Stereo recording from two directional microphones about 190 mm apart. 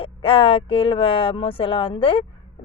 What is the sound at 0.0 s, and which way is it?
Speech, 30° left (ahead or behind).